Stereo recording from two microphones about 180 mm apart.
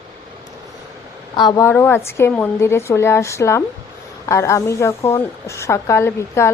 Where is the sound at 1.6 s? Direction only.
10° left (ahead or behind).